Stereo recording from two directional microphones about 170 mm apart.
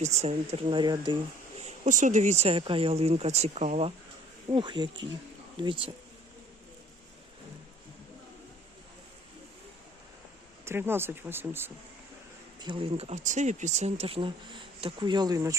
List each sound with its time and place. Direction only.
0.0 s speech: 40° right (ahead or behind)
1.5 s speech: 45° right (ahead or behind)
4.4 s speech: 25° right (ahead or behind)
10.7 s speech: 15° right (ahead or behind)
12.5 s speech: 30° right (ahead or behind)